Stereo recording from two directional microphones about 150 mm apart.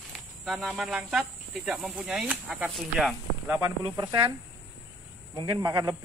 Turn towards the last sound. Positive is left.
turn(degrees=-25)  # may be behind; listen again after turning